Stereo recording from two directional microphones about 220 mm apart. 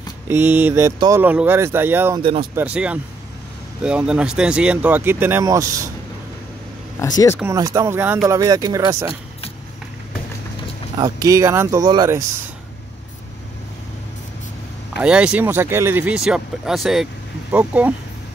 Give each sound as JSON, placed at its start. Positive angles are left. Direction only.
{"t": 0.3, "sound": "speech", "side_deg": -10}
{"t": 7.0, "sound": "speech", "side_deg": 15}
{"t": 7.3, "sound": "speech", "side_deg": -15}
{"t": 11.0, "sound": "speech", "side_deg": -15}
{"t": 15.0, "sound": "speech", "side_deg": -5}